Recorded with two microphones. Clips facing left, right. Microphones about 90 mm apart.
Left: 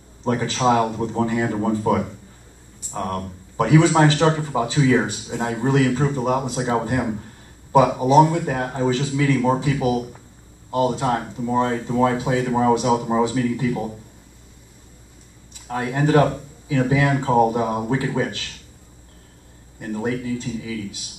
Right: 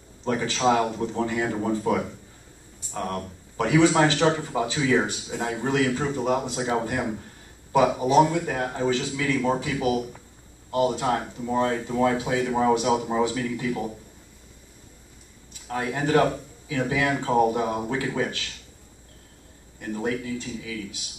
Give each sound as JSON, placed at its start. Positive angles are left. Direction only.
{"t": 0.2, "sound": "a man's voice", "side_deg": 20}
{"t": 15.7, "sound": "a man's voice", "side_deg": 25}
{"t": 19.8, "sound": "a man's voice", "side_deg": 25}